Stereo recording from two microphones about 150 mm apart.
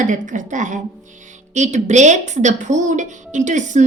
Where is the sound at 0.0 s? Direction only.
55° right (ahead or behind).